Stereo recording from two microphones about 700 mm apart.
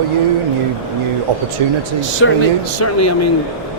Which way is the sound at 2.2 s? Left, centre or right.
Centre.